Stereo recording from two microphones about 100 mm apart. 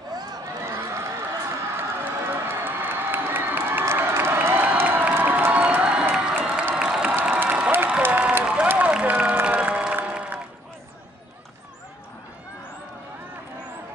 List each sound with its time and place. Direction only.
0.7 s run: 25° right (ahead or behind)
1.8 s crowd: 25° right (ahead or behind)
7.2 s applause: 15° right (ahead or behind)
8.0 s crowd: 15° right (ahead or behind)
8.6 s applause: 15° right (ahead or behind)